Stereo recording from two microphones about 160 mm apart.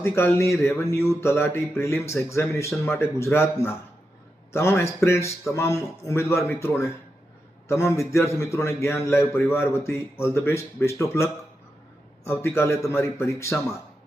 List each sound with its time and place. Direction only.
0.0 s a man's voice: 15° left (ahead or behind)